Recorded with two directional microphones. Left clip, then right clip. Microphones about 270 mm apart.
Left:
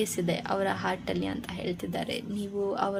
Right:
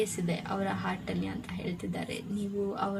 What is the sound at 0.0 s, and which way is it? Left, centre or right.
Speech, left.